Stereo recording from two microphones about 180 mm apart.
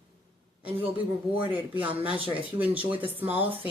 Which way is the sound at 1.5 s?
10° right (ahead or behind).